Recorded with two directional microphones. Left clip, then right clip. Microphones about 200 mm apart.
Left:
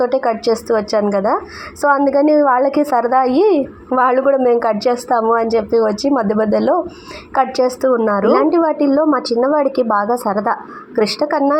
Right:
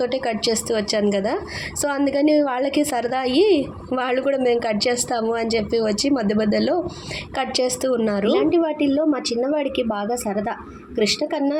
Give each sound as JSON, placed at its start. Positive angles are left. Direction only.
{"t": 0.0, "sound": "a woman's voice", "side_deg": -10}
{"t": 3.3, "sound": "a woman's voice", "side_deg": 30}
{"t": 3.9, "sound": "a woman's voice", "side_deg": -10}
{"t": 8.3, "sound": "a woman's voice", "side_deg": 0}